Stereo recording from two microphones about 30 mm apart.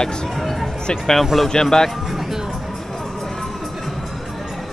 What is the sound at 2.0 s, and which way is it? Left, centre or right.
Music, centre.